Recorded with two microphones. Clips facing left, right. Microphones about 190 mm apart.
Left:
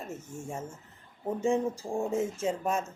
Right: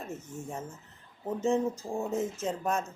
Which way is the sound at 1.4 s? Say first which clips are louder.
Even; 10° left (ahead or behind).